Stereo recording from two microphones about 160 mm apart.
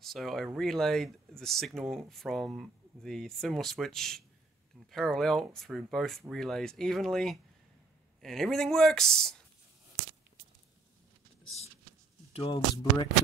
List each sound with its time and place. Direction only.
0.0 s speech: centre (ahead or behind)
12.3 s speech: 35° left (ahead or behind)